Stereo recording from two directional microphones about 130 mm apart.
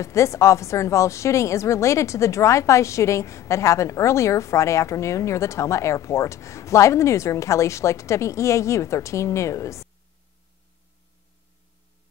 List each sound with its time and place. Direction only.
0.0 s a woman's voice: 25° left (ahead or behind)